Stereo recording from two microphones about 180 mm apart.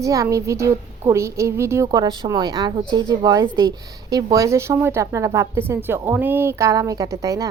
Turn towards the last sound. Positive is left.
turn(degrees=-20)  # may be behind; listen again after turning